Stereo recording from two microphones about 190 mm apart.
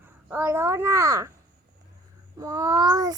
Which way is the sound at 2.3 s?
20° right (ahead or behind).